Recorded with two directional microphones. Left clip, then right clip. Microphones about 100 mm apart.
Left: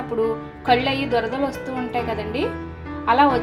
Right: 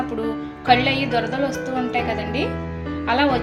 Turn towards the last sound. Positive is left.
turn(degrees=20)  # may be behind; listen again after turning